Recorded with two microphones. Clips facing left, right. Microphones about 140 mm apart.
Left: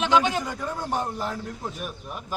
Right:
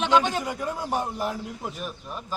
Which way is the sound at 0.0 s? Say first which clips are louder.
Even; 5° left (ahead or behind).